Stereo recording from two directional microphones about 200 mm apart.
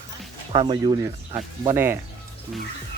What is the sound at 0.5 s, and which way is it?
Speech, 25° right (ahead or behind).